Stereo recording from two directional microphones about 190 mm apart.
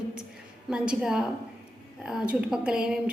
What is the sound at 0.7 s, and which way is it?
Speech, 5° right (ahead or behind).